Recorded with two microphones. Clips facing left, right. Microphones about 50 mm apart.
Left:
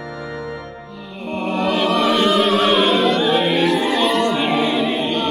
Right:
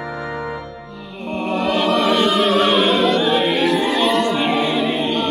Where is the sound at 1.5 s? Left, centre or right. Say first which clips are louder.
Even; centre.